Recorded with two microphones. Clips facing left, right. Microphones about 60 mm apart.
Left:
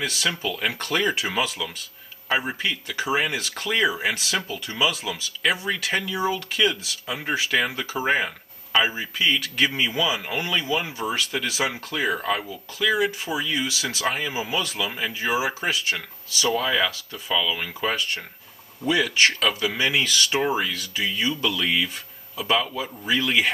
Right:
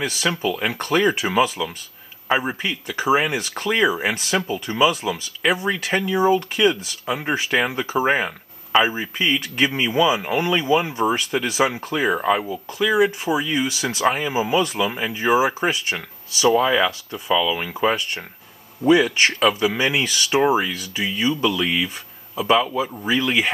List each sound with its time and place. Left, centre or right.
0.0 s speech: centre
5.7 s speech: centre
6.6 s speech: centre
10.9 s speech: right
11.3 s speech: right
15.1 s speech: right